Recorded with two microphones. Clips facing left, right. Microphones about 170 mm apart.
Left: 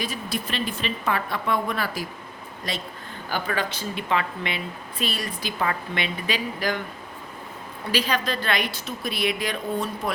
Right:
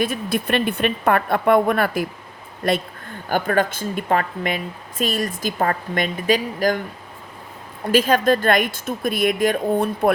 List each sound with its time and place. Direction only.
0.0 s a woman's voice: 55° right (ahead or behind)
7.9 s speech: 50° right (ahead or behind)